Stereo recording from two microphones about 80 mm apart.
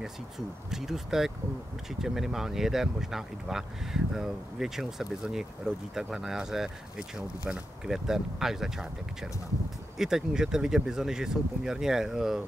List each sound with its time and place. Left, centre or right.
0.7 s speech: centre